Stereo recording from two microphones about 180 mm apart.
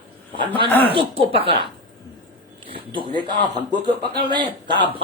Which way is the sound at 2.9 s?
25° left (ahead or behind).